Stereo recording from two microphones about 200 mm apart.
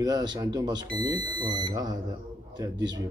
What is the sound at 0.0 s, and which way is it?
Speech, 20° right (ahead or behind).